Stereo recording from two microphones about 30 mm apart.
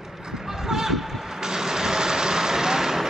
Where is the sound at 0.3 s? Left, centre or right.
Centre.